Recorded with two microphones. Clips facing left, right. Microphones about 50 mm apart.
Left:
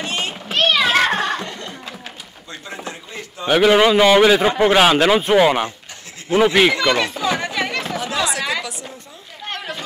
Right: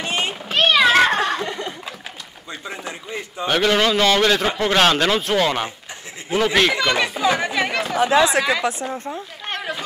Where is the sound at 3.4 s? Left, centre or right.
Centre.